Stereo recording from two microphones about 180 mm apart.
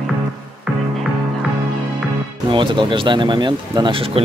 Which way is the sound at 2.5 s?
25° right (ahead or behind).